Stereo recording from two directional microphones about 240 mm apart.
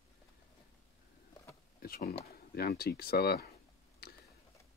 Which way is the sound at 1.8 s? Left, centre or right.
Left.